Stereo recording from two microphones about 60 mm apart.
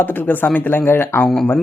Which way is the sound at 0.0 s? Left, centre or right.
Left.